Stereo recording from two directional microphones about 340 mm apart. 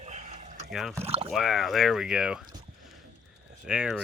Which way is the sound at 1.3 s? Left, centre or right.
Centre.